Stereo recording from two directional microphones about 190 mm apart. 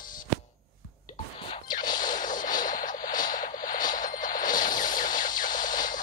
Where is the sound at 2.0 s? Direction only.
45° left (ahead or behind).